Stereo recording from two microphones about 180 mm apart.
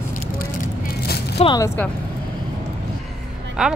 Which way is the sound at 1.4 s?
25° left (ahead or behind).